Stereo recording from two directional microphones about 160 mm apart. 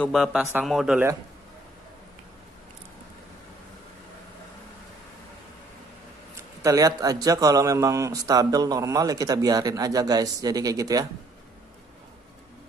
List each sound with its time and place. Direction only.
0.0 s a man's voice: centre (ahead or behind)
6.3 s a man's voice: 20° right (ahead or behind)